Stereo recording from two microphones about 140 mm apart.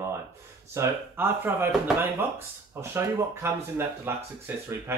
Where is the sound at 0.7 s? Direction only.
15° right (ahead or behind).